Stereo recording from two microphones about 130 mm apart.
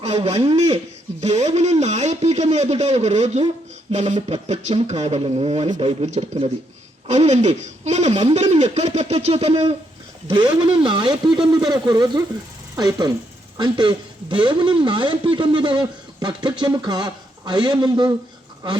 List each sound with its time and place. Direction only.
0.0 s speech: 50° right (ahead or behind)
7.1 s speech: 60° right (ahead or behind)
10.3 s speech: 35° right (ahead or behind)